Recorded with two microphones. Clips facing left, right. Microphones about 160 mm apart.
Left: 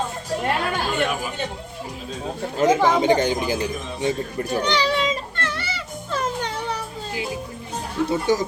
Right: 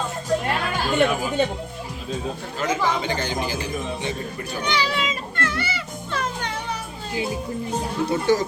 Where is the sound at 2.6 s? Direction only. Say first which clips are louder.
Left 7 dB; 45° left (ahead or behind).